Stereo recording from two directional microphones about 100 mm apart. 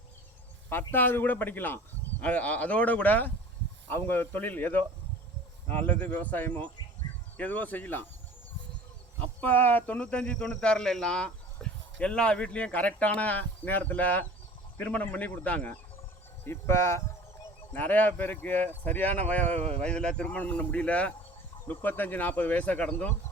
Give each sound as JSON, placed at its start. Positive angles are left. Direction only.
{"t": 0.7, "sound": "speech", "side_deg": 20}
{"t": 9.2, "sound": "speech", "side_deg": 15}
{"t": 16.4, "sound": "speech", "side_deg": 25}